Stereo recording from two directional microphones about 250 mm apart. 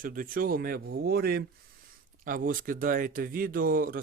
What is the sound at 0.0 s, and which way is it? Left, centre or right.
Speech, right.